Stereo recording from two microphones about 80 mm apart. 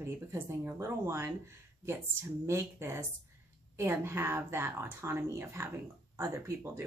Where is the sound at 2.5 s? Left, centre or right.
Right.